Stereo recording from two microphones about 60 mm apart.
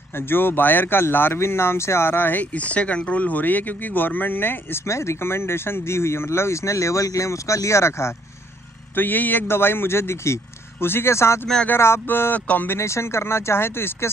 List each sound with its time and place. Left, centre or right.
0.3 s a man's voice: left
2.5 s speech: left
4.8 s speech: left
8.9 s a man's voice: left
12.6 s speech: left